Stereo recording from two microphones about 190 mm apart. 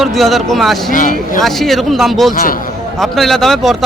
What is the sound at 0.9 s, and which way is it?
Speech, 45° left (ahead or behind).